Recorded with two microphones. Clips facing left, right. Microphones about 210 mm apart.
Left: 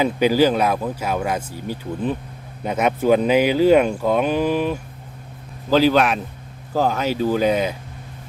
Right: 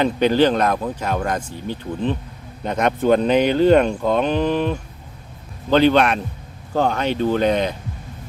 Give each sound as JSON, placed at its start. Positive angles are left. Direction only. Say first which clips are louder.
{"t": 0.0, "sound": "speech", "louder": "even", "side_deg": 5}